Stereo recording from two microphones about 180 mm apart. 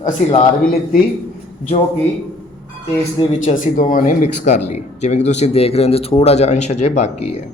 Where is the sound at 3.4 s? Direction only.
45° left (ahead or behind).